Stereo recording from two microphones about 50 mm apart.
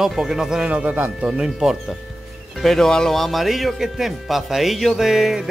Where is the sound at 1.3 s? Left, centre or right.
Centre.